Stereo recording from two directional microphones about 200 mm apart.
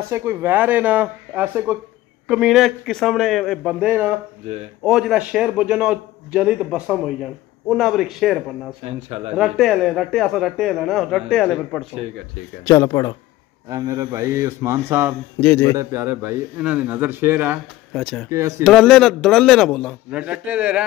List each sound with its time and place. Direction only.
0.1 s a man's voice: 10° right (ahead or behind)
8.8 s speech: 30° right (ahead or behind)
9.3 s a man's voice: centre (ahead or behind)
12.6 s speech: 15° left (ahead or behind)
13.7 s a man's voice: 15° right (ahead or behind)
18.6 s a man's voice: centre (ahead or behind)
20.1 s a man's voice: 5° right (ahead or behind)